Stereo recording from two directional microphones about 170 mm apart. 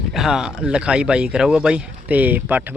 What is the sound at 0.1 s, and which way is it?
Speech, centre (ahead or behind).